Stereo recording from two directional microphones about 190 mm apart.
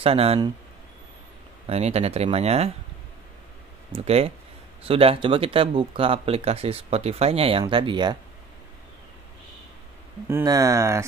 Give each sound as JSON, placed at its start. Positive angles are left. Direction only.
{"t": 0.0, "sound": "speech", "side_deg": -30}
{"t": 1.7, "sound": "speech", "side_deg": -35}
{"t": 3.9, "sound": "speech", "side_deg": -30}
{"t": 10.2, "sound": "speech", "side_deg": -15}